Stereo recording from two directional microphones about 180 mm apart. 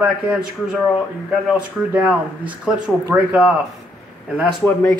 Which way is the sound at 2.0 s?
5° right (ahead or behind).